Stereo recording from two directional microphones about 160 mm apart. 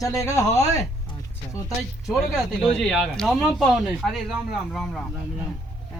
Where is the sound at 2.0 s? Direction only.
Centre (ahead or behind).